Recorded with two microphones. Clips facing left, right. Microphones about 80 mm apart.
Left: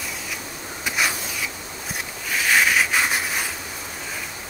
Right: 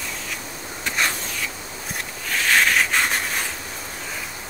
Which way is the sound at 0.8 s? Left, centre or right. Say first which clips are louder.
Even; centre.